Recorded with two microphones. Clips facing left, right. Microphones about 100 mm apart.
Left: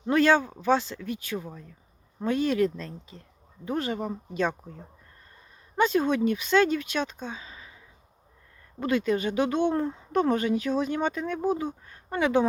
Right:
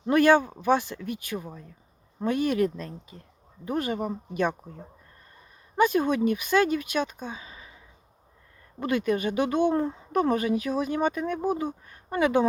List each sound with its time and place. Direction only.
0.1 s speech: 15° right (ahead or behind)
5.7 s speech: 15° right (ahead or behind)
7.5 s a sound: 25° right (ahead or behind)
8.8 s speech: 15° right (ahead or behind)